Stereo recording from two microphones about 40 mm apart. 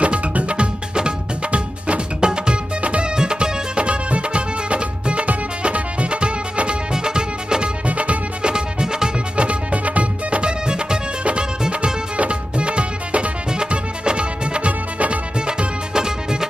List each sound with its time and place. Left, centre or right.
0.0 s music: right
3.2 s music: centre
7.8 s music: right
8.4 s music: right
9.4 s music: right
10.4 s music: right
12.2 s music: right
15.4 s music: centre